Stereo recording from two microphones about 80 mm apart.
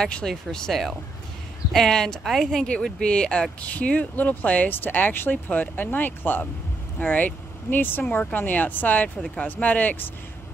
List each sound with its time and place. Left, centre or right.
0.0 s speech: centre